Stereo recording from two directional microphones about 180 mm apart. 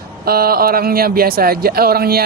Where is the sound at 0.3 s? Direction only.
55° right (ahead or behind).